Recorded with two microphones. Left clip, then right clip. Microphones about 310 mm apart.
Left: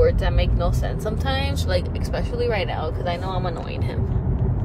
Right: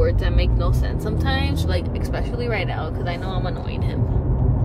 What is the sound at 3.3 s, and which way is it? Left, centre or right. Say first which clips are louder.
Speech: left 1 dB; centre.